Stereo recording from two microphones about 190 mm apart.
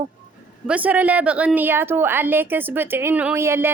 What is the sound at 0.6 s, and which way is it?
A woman's voice, 5° right (ahead or behind).